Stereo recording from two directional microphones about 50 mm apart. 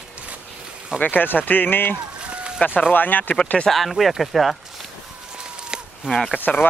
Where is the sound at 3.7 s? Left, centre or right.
Centre.